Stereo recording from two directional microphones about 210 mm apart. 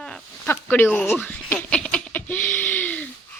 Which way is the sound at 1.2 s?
10° left (ahead or behind).